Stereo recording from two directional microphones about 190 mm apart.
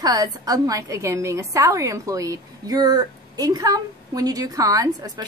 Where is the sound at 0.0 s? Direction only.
20° right (ahead or behind).